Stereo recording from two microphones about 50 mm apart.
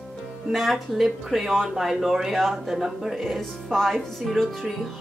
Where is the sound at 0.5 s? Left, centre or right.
Centre.